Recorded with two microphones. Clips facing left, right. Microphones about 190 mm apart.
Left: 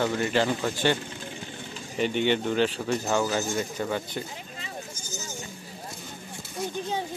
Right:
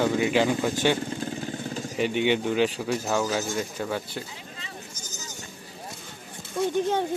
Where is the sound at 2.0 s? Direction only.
10° right (ahead or behind).